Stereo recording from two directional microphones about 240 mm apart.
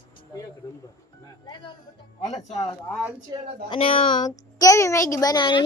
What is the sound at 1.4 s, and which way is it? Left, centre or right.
Speech, centre.